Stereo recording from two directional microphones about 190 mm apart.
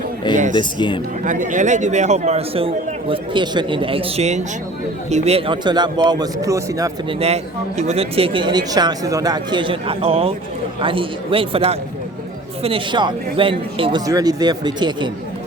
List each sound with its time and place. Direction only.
0.5 s speech: 25° left (ahead or behind)
1.2 s a man's voice: 45° right (ahead or behind); by 6.9 s 20° right (ahead or behind)
7.2 s speech: 35° right (ahead or behind)